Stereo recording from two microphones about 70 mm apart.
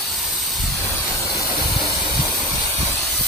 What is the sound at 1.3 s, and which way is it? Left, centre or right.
Steam, left.